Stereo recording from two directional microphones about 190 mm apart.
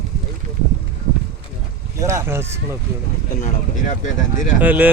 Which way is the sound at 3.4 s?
40° left (ahead or behind).